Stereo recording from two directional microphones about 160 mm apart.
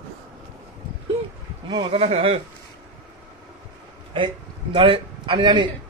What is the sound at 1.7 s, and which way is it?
Speech, 35° right (ahead or behind).